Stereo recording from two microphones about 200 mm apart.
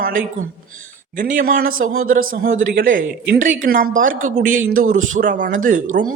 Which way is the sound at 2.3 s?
45° right (ahead or behind).